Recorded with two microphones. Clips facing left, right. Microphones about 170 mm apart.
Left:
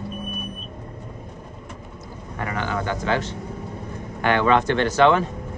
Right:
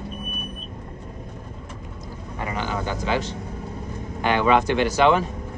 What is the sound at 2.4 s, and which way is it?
Speech, 20° right (ahead or behind).